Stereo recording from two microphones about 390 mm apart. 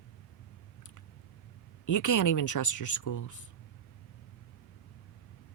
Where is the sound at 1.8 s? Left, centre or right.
Left.